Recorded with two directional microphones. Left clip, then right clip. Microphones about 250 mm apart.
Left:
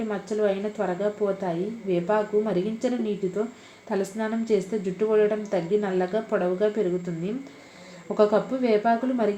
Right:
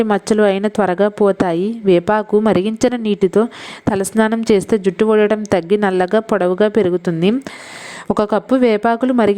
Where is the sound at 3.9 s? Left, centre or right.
Right.